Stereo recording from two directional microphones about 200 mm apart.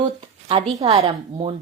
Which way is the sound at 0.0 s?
25° right (ahead or behind).